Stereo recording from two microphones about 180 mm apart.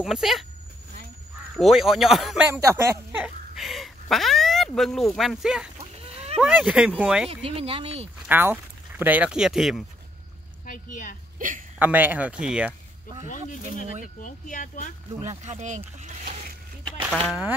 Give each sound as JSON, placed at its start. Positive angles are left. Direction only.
{"t": 0.0, "sound": "speech", "side_deg": 0}
{"t": 1.6, "sound": "speech", "side_deg": 0}
{"t": 7.2, "sound": "speech", "side_deg": -30}
{"t": 8.3, "sound": "speech", "side_deg": -10}
{"t": 10.6, "sound": "speech", "side_deg": 45}
{"t": 11.3, "sound": "speech", "side_deg": -45}
{"t": 11.8, "sound": "speech", "side_deg": -10}
{"t": 14.0, "sound": "speech", "side_deg": 45}
{"t": 15.2, "sound": "speech", "side_deg": -40}
{"t": 16.0, "sound": "boat", "side_deg": -40}
{"t": 17.3, "sound": "speech", "side_deg": -5}